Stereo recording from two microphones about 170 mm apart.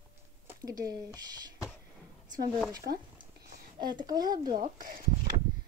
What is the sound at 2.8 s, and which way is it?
Speech, 50° right (ahead or behind).